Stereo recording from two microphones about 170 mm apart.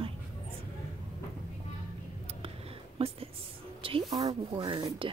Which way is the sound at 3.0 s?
35° right (ahead or behind).